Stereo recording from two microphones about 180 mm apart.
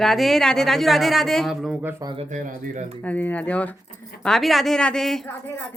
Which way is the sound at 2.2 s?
45° right (ahead or behind).